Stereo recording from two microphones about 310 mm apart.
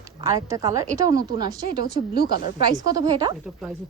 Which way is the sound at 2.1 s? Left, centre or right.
Left.